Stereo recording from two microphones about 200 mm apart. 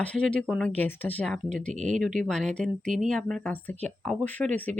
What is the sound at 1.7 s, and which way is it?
Speech, 35° right (ahead or behind).